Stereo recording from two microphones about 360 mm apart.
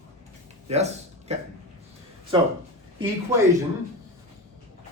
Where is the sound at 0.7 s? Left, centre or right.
Centre.